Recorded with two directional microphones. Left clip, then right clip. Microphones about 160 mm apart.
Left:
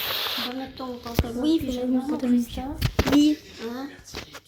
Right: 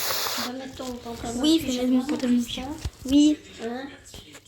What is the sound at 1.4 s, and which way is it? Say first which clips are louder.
Speech: right 3 dB; 5° left (ahead or behind).